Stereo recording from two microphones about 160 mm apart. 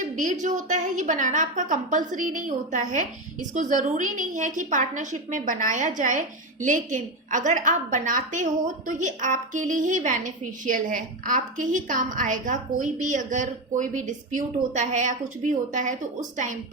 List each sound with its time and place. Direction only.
0.2 s a woman's voice: 50° right (ahead or behind)